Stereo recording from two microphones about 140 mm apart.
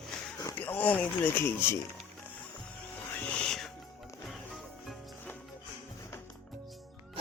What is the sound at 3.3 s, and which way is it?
Music, 5° left (ahead or behind).